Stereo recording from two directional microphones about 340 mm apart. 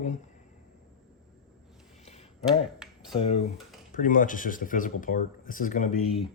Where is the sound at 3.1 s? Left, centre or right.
Centre.